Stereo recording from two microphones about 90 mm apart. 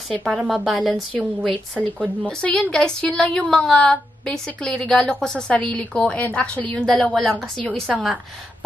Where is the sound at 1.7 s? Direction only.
10° left (ahead or behind).